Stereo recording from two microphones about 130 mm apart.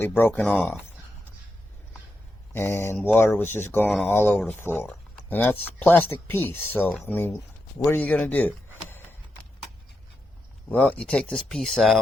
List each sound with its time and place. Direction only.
0.0 s speech: 15° left (ahead or behind)
2.5 s mantra: 20° left (ahead or behind)
3.2 s a man's voice: 15° left (ahead or behind)
10.7 s speech: 10° left (ahead or behind)